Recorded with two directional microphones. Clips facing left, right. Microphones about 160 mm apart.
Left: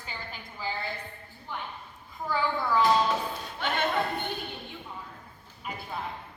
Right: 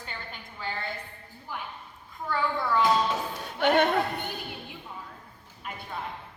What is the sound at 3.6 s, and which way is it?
Speech, 60° right (ahead or behind).